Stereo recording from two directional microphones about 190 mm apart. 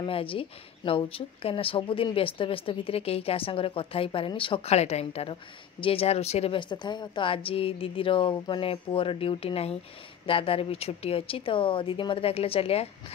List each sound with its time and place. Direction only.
0.0 s speech: 30° left (ahead or behind)